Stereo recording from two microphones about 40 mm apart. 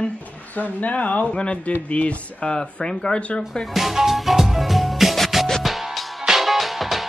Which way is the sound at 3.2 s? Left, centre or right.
Left.